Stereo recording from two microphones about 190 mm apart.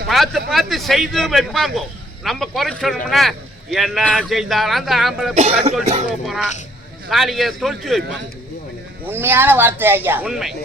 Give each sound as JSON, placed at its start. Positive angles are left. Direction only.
{"t": 0.1, "sound": "speech", "side_deg": 0}
{"t": 5.3, "sound": "speech", "side_deg": -35}
{"t": 6.2, "sound": "speech", "side_deg": 0}
{"t": 9.0, "sound": "speech", "side_deg": -10}